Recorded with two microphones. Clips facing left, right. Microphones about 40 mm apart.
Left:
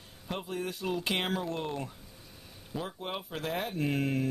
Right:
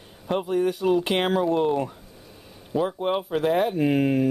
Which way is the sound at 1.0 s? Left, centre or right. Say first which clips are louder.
Right 8 dB; right.